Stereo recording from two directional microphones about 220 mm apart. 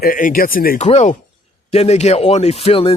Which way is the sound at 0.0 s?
40° left (ahead or behind).